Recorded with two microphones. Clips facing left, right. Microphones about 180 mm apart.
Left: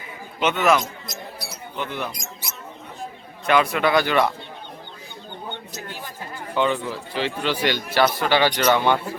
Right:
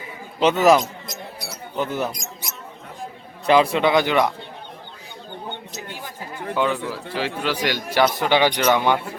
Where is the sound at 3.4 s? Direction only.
30° right (ahead or behind).